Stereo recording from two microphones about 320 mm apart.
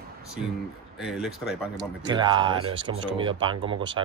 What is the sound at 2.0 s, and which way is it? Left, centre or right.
Speech, centre.